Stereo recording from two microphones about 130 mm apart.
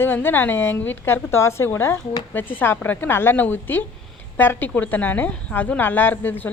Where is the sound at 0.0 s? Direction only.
15° left (ahead or behind).